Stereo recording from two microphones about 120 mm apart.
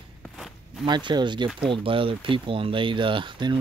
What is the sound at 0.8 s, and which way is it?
Speech, 40° right (ahead or behind).